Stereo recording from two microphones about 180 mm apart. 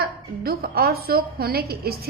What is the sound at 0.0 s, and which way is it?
A woman's voice, 55° right (ahead or behind).